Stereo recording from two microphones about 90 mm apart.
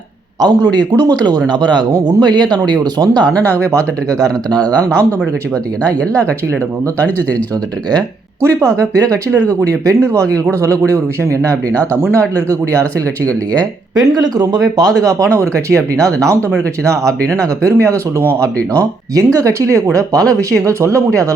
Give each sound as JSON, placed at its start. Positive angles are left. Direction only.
{"t": 0.3, "sound": "speech", "side_deg": -50}
{"t": 3.3, "sound": "speech", "side_deg": 20}
{"t": 3.7, "sound": "speech", "side_deg": -40}
{"t": 4.8, "sound": "speech", "side_deg": 15}
{"t": 8.4, "sound": "speech", "side_deg": -40}
{"t": 12.1, "sound": "speech", "side_deg": 15}
{"t": 13.9, "sound": "speech", "side_deg": -45}
{"t": 19.1, "sound": "speech", "side_deg": -40}